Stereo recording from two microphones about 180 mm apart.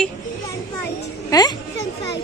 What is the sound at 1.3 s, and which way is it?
Speech, 20° left (ahead or behind).